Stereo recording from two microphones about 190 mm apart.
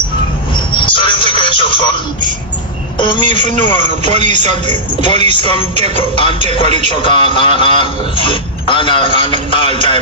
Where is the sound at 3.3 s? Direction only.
40° right (ahead or behind).